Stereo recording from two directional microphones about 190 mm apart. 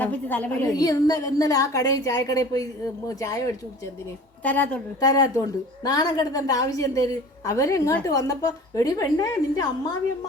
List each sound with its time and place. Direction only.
0.0 s a woman's voice: 10° left (ahead or behind)
0.7 s a woman's voice: 20° left (ahead or behind)